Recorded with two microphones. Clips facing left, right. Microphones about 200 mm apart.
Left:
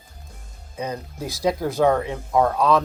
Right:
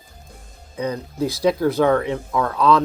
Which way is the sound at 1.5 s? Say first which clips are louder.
Right 2 dB; 65° right (ahead or behind).